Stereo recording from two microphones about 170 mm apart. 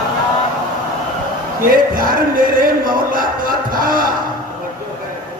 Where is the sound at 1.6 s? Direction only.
55° right (ahead or behind).